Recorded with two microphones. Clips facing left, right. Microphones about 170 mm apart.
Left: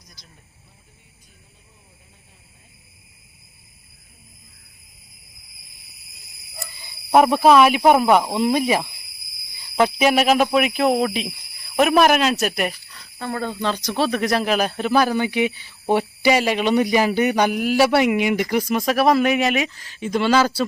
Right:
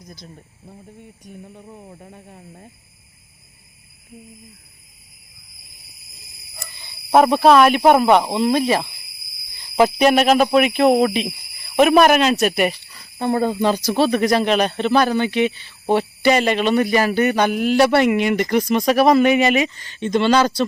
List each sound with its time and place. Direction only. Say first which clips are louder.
0.0 s speech: right 12 dB; 55° right (ahead or behind)
7.3 s speech: right 1 dB; 10° left (ahead or behind)
9.7 s speech: right 3 dB; centre (ahead or behind)
13.1 s speech: right 7 dB; 20° right (ahead or behind); by 20.7 s 5° left (ahead or behind)